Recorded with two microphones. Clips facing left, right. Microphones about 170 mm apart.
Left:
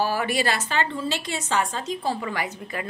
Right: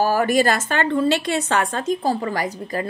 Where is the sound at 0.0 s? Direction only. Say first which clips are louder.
Right 6 dB; 45° right (ahead or behind).